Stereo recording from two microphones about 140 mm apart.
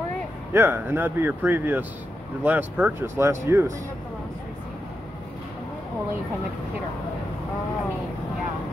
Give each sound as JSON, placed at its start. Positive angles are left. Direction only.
{"t": 0.5, "sound": "speech", "side_deg": -15}